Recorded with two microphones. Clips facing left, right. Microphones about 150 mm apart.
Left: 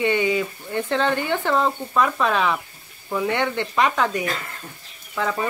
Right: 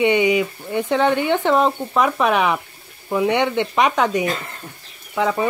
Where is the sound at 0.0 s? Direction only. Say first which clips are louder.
Right 4 dB; 20° right (ahead or behind).